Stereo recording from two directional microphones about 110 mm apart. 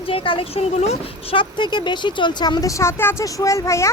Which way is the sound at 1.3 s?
45° left (ahead or behind).